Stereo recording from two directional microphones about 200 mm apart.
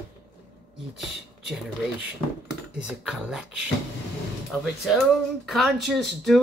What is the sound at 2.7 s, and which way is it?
Speech, 5° right (ahead or behind).